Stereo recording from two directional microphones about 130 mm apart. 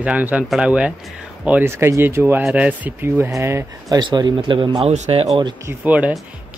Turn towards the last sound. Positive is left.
turn(degrees=-10)  # may be behind; listen again after turning